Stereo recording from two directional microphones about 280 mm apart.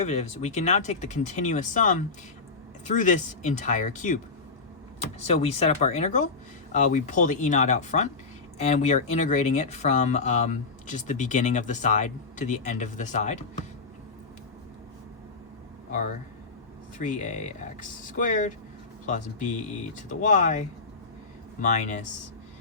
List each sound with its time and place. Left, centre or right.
0.0 s speech: left
5.2 s speech: left
15.9 s speech: left